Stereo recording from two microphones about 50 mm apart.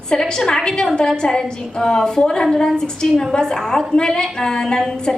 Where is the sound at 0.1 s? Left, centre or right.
Centre.